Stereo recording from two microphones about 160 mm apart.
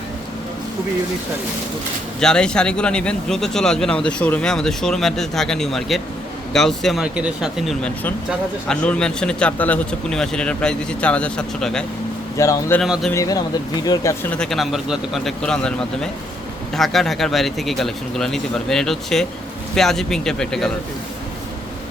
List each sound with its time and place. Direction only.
2.2 s speech: 5° left (ahead or behind)
12.4 s speech: 20° left (ahead or behind)
12.8 s speech: centre (ahead or behind)
13.1 s speech: 20° left (ahead or behind)
14.3 s speech: 5° left (ahead or behind)